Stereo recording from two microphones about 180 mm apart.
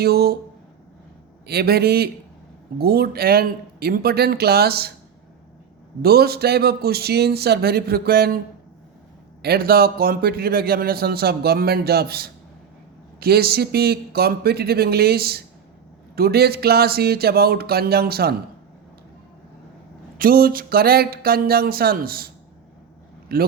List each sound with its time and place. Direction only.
0.0 s a man's voice: 60° right (ahead or behind)
1.5 s a man's voice: 60° right (ahead or behind)
6.0 s a man's voice: 60° right (ahead or behind)
9.4 s a man's voice: 60° right (ahead or behind)
20.1 s a man's voice: 55° right (ahead or behind)
23.3 s a man's voice: 55° right (ahead or behind)